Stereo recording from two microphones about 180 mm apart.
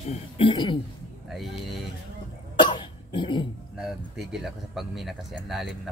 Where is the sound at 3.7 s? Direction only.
5° right (ahead or behind).